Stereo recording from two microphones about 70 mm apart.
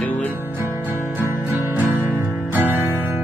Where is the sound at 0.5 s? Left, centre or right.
Right.